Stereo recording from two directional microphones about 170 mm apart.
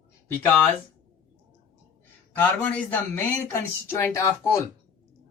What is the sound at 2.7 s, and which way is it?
Speech, 10° left (ahead or behind).